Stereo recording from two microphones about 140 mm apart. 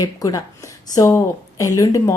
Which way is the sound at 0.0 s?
25° left (ahead or behind).